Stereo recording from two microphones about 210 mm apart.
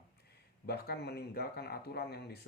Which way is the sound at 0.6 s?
50° left (ahead or behind).